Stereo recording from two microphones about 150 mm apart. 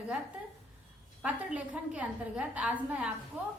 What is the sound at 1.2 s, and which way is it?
A woman's voice, 10° right (ahead or behind).